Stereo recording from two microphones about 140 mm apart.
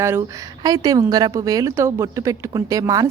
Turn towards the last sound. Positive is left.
turn(degrees=-25)  # may be behind; listen again after turning